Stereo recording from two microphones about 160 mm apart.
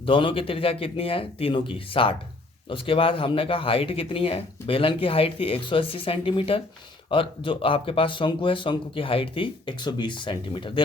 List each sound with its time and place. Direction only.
0.0 s speech: 30° left (ahead or behind)